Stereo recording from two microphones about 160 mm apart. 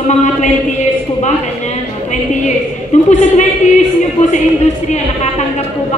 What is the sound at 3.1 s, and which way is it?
A woman's voice, 50° left (ahead or behind).